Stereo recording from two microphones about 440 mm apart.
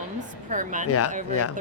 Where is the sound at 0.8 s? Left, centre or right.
Left.